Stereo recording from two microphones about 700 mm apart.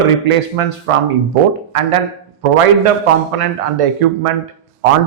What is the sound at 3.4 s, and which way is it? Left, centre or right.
Speech, right.